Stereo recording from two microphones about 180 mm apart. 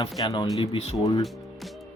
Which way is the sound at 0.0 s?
25° left (ahead or behind).